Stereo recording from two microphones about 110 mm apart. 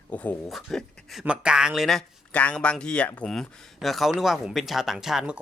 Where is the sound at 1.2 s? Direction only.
10° right (ahead or behind); by 3.4 s 10° left (ahead or behind).